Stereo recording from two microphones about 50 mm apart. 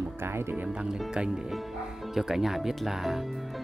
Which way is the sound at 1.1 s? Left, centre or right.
Centre.